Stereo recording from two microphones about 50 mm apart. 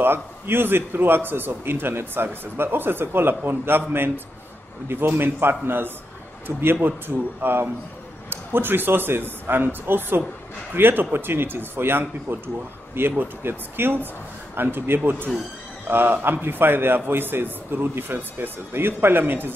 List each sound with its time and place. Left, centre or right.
0.0 s a man's voice: right
4.8 s a man's voice: right